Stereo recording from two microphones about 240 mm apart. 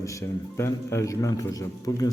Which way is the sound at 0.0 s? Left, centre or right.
Centre.